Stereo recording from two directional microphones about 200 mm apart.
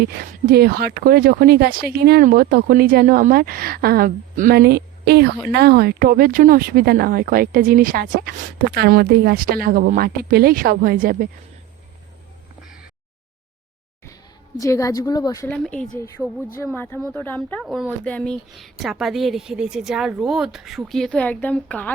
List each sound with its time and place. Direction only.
0.0 s speech: 50° right (ahead or behind)
14.6 s speech: 15° left (ahead or behind)
15.4 s speech: 5° left (ahead or behind)